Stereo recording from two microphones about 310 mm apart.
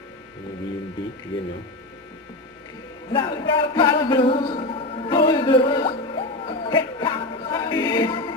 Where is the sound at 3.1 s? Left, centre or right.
Centre.